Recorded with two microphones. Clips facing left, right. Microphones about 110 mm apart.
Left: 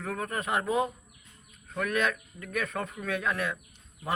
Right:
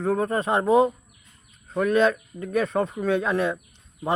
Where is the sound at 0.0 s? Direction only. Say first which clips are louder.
Right 10 dB; 30° right (ahead or behind).